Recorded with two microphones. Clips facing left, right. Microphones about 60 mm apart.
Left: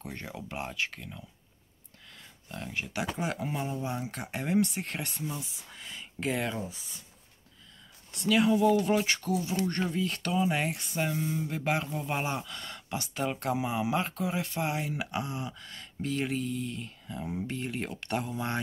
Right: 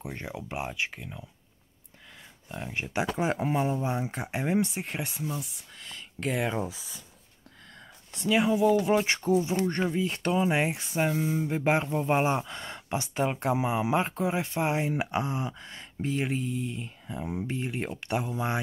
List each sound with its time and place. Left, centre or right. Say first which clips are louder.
0.0 s speech: right 3 dB; centre
2.7 s speech: right 4 dB; right
4.8 s speech: right 2 dB; centre
5.8 s speech: even; centre
8.1 s speech: right 1 dB; right
8.5 s speech: right 1 dB; centre
8.7 s speech: right 2 dB; right
11.0 s speech: right 4 dB; centre
11.3 s speech: right 5 dB; right